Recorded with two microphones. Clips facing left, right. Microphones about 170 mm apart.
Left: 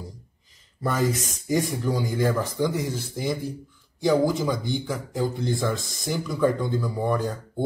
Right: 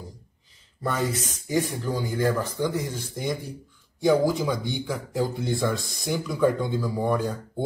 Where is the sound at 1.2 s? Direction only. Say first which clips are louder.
Left 1 dB; 35° left (ahead or behind).